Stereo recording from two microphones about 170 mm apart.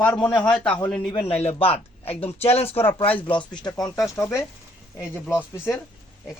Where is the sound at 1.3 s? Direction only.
35° left (ahead or behind).